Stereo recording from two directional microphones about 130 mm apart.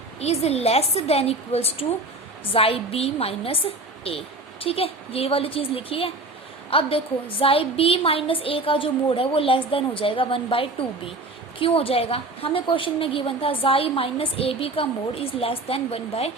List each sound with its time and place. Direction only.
0.2 s a woman's voice: 55° left (ahead or behind)